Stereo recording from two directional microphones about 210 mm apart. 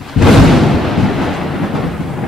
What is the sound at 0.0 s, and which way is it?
Thunder, centre (ahead or behind).